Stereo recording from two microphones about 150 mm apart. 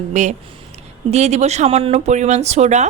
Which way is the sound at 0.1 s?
50° right (ahead or behind).